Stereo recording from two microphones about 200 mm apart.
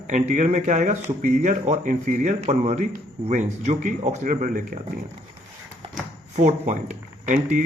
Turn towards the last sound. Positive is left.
turn(degrees=-40)  # may be behind; listen again after turning